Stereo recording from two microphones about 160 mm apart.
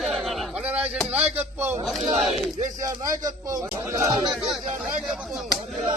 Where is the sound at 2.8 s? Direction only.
25° right (ahead or behind).